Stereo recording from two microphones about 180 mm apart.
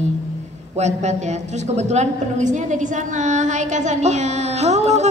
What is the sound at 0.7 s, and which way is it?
A woman's voice, 40° right (ahead or behind).